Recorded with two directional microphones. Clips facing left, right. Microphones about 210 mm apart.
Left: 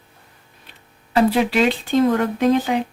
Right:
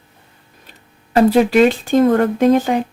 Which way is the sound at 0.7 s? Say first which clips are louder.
Right 3 dB; 45° right (ahead or behind).